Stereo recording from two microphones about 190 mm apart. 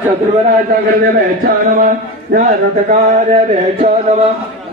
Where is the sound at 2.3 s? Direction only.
45° right (ahead or behind).